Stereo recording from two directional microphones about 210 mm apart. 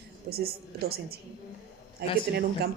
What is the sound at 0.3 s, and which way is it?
Speech, 50° right (ahead or behind).